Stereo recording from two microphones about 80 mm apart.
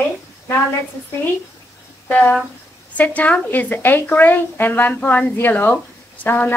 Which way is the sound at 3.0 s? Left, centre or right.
Centre.